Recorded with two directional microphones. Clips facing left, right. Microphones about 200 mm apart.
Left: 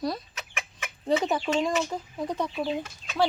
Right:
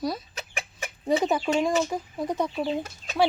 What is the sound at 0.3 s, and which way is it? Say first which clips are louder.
Chicken: right 3 dB; 35° right (ahead or behind).